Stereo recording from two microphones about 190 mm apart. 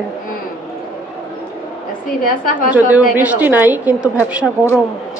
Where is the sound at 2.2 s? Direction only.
45° left (ahead or behind).